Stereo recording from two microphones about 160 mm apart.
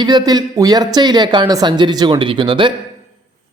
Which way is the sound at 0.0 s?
25° right (ahead or behind).